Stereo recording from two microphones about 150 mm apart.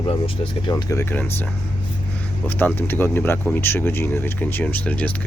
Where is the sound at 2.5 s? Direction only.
15° left (ahead or behind).